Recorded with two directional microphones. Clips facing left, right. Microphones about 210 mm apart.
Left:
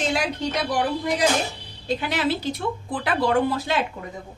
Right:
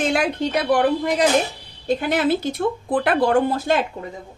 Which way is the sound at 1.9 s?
50° right (ahead or behind).